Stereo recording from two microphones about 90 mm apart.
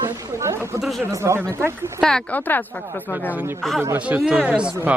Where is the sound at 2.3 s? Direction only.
20° left (ahead or behind).